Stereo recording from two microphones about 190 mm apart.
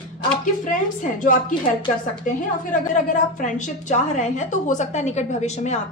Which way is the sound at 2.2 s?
45° left (ahead or behind).